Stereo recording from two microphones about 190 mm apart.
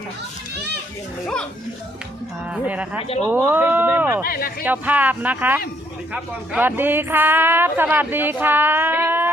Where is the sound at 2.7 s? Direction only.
5° right (ahead or behind).